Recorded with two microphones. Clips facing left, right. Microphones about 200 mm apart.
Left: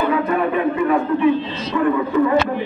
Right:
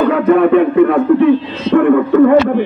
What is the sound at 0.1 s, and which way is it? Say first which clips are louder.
A man's voice: right 9 dB; 70° right (ahead or behind).